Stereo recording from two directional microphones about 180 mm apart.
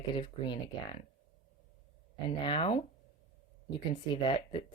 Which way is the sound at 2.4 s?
30° left (ahead or behind).